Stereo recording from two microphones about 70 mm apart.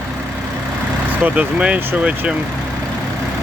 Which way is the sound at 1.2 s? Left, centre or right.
Centre.